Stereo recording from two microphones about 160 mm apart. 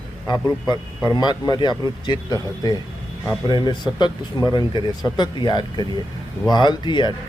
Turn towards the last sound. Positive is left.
turn(degrees=30)  # may be behind; listen again after turning